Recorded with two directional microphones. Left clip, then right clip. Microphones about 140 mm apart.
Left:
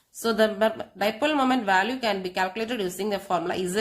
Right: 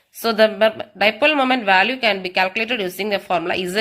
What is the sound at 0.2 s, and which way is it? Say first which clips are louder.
A woman's voice: right 7 dB; 20° right (ahead or behind).